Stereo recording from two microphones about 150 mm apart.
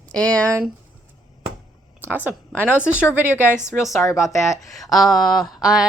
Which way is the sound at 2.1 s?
10° right (ahead or behind).